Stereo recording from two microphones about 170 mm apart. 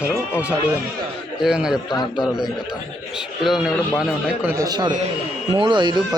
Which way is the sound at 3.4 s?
5° right (ahead or behind).